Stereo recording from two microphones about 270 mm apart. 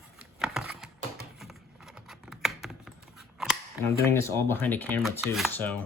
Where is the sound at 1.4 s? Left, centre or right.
Centre.